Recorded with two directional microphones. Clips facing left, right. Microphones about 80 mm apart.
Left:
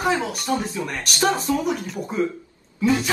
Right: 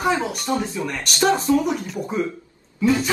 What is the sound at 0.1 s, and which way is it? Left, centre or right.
Speech, right.